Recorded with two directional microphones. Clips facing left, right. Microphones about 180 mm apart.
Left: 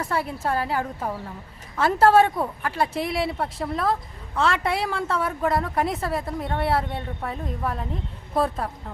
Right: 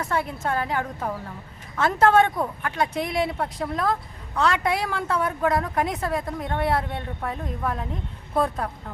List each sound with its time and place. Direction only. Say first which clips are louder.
0.1 s speech: even; 5° left (ahead or behind)
0.5 s a woman's voice: left 1 dB; 35° left (ahead or behind)
1.7 s a woman's voice: left 1 dB; 10° left (ahead or behind)
2.0 s a woman's voice: left 2 dB; 35° left (ahead or behind)
2.4 s speech: even; 5° left (ahead or behind)